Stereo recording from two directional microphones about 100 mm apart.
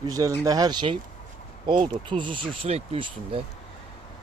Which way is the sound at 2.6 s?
90° right.